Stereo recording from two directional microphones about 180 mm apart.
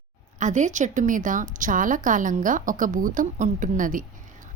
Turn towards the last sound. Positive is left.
turn(degrees=-45)  # may be behind; listen again after turning